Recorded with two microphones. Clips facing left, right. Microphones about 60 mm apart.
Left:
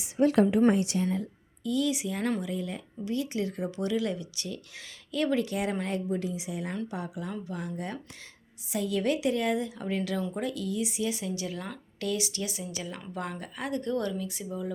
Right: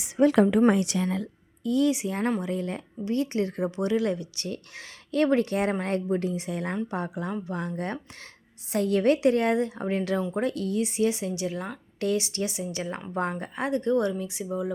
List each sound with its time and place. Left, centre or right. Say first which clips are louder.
0.7 s a woman's voice: right 2 dB; right
1.6 s speech: right 5 dB; right
6.9 s speech: right 5 dB; right
7.6 s speech: right 4 dB; right